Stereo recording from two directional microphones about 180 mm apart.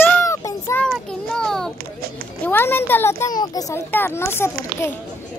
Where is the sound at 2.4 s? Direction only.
10° left (ahead or behind).